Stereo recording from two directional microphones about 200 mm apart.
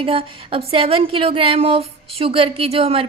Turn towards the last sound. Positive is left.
turn(degrees=-30)  # may be behind; listen again after turning